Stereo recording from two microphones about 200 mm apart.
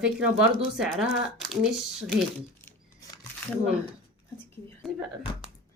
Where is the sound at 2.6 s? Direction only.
20° left (ahead or behind).